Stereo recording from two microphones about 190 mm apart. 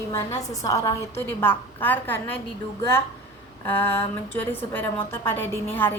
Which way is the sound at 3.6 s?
10° left (ahead or behind).